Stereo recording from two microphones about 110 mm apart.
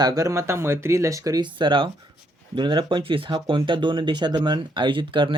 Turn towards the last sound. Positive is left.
turn(degrees=-50)  # may be behind; listen again after turning